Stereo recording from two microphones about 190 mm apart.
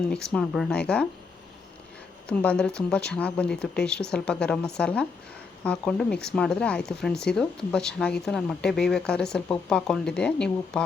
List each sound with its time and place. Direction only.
0.1 s speech: 5° left (ahead or behind)
2.2 s speech: 5° left (ahead or behind)